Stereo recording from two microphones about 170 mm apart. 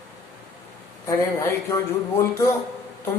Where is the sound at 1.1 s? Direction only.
15° left (ahead or behind).